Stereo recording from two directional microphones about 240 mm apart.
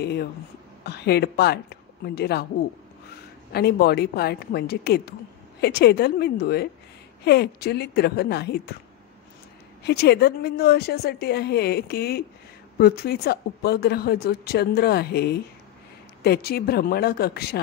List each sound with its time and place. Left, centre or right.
0.0 s a woman's voice: left
3.5 s a woman's voice: left
9.8 s speech: left